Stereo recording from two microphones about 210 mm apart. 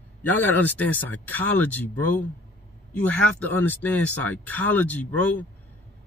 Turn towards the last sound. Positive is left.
turn(degrees=10)  # may be behind; listen again after turning